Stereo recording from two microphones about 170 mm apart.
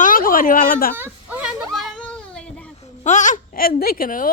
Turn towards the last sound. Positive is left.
turn(degrees=55)  # may be behind; listen again after turning